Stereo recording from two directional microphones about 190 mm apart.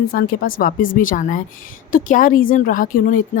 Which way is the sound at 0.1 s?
50° left (ahead or behind).